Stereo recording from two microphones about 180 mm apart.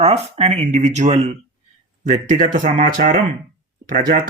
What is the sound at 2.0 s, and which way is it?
Speech, 50° right (ahead or behind).